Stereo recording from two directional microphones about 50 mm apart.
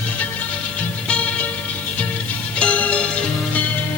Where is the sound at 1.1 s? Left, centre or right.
Left.